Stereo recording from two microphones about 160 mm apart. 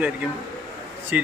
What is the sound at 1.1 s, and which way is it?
Speech, 10° right (ahead or behind).